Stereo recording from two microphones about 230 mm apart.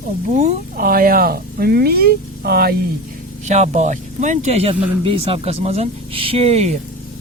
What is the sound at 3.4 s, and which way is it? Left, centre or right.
Speech, right.